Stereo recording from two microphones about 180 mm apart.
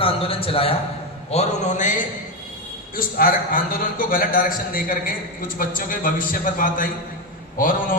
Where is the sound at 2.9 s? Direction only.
50° left (ahead or behind).